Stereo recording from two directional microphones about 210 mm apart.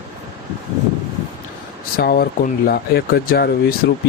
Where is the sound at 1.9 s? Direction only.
45° left (ahead or behind).